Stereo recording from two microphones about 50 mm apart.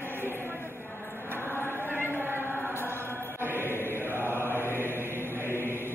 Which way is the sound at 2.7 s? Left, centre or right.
Left.